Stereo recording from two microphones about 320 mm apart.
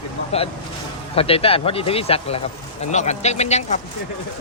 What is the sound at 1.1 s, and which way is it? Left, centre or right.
Speech, centre.